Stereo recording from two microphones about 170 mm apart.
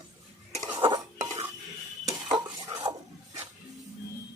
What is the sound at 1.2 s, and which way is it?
Dishes, 15° right (ahead or behind).